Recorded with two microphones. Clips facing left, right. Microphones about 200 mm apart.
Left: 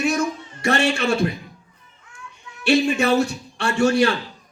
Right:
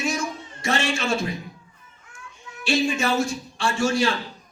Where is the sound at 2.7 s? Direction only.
65° left (ahead or behind).